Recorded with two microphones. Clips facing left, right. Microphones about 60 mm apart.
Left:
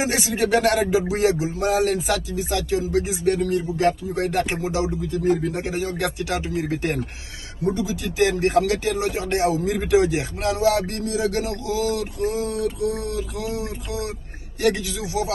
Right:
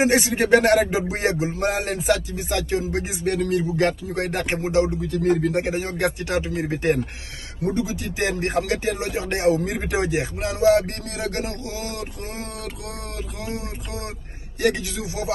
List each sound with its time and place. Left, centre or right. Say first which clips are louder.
0.0 s speech: right 3 dB; right
3.3 s a man's voice: right 1 dB; right
4.6 s speech: right 4 dB; right
5.0 s speech: right 1 dB; right
5.6 s speech: right 2 dB; right
9.5 s speech: right 2 dB; right
9.8 s speech: left 6 dB; right
14.6 s speech: left 1 dB; right